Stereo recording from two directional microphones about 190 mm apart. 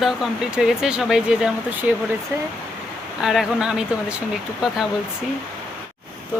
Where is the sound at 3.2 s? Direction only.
5° right (ahead or behind).